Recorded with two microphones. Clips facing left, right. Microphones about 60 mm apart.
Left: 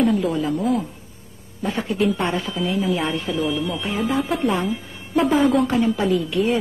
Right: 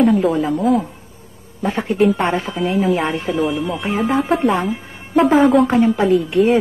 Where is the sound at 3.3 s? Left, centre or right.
Right.